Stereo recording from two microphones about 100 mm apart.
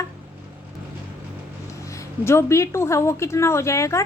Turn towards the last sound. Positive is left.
turn(degrees=30)  # may be behind; listen again after turning